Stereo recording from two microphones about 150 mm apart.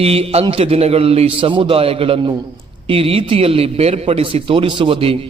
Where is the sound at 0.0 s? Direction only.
40° right (ahead or behind).